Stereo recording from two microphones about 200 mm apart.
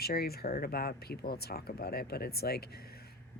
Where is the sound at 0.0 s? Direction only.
50° left (ahead or behind).